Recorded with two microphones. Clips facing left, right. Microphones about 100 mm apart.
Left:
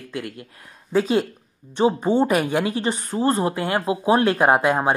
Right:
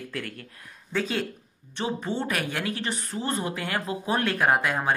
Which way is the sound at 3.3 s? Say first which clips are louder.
Left 7 dB; 25° left (ahead or behind).